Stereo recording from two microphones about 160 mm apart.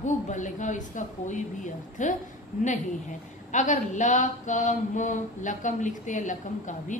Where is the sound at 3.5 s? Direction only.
50° left (ahead or behind).